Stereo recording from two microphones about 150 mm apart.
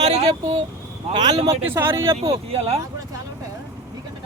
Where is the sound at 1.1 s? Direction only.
30° right (ahead or behind).